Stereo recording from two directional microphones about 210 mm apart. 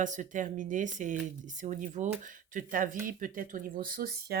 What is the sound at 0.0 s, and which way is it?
Speech, 35° right (ahead or behind).